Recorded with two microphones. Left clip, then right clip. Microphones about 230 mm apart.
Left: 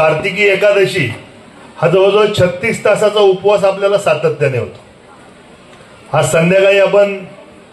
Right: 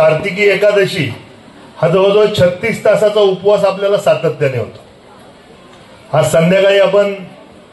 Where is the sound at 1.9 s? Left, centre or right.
Left.